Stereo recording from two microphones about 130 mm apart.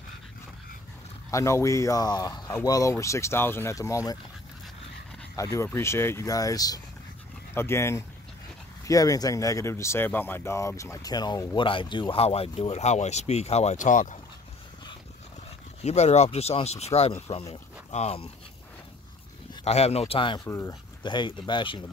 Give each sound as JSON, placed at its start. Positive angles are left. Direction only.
{"t": 1.3, "sound": "speech", "side_deg": 25}
{"t": 5.3, "sound": "speech", "side_deg": 25}
{"t": 12.7, "sound": "speech", "side_deg": 60}
{"t": 15.8, "sound": "speech", "side_deg": 60}
{"t": 19.6, "sound": "speech", "side_deg": 55}
{"t": 20.4, "sound": "speech", "side_deg": 20}
{"t": 21.0, "sound": "speech", "side_deg": 35}